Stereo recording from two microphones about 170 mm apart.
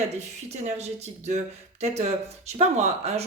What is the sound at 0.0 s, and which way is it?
Speech, 40° right (ahead or behind).